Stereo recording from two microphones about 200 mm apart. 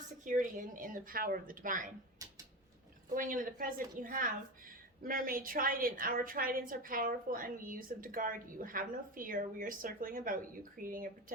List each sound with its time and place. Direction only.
0.3 s a woman's voice: 40° right (ahead or behind)
3.2 s a woman's voice: 40° right (ahead or behind)